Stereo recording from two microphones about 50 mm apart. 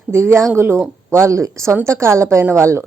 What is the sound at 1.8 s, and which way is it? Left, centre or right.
Speech, right.